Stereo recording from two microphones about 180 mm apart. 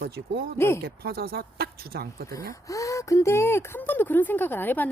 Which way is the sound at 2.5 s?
20° left (ahead or behind).